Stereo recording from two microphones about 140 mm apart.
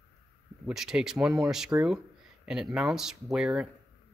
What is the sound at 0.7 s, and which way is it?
Speech, 5° right (ahead or behind).